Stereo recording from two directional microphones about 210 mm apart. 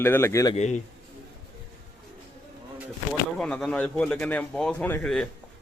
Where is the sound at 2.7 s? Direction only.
Centre (ahead or behind).